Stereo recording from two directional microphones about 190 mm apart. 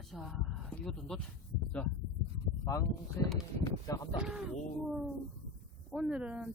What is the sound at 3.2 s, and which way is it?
Speech, 15° left (ahead or behind).